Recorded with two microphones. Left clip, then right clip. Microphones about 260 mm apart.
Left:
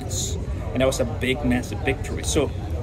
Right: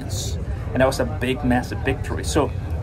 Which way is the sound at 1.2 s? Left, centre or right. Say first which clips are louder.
Right 2 dB; right.